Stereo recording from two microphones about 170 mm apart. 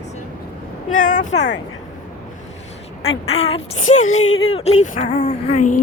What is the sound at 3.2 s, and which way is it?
Speech, 40° left (ahead or behind).